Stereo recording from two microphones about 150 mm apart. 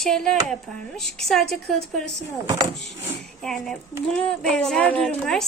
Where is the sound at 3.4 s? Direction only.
5° left (ahead or behind).